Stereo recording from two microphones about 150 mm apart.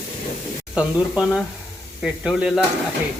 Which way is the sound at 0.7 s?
5° right (ahead or behind).